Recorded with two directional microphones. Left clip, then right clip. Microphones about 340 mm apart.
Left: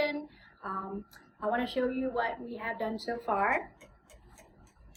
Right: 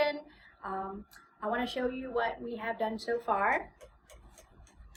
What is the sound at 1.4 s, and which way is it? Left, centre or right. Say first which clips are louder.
A woman's voice: left 2 dB; centre.